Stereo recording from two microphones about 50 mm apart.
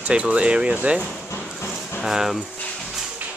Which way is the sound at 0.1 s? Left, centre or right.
Right.